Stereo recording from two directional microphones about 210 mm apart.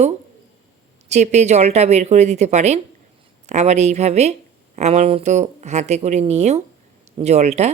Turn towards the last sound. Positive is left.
turn(degrees=-30)  # may be behind; listen again after turning